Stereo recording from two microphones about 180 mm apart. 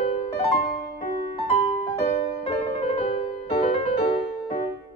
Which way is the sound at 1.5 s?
30° left (ahead or behind).